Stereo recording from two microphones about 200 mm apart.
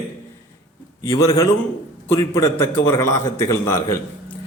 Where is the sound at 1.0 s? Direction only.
15° left (ahead or behind).